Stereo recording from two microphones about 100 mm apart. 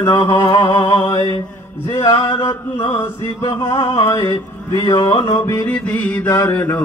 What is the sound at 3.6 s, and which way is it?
Mantra, 45° left (ahead or behind).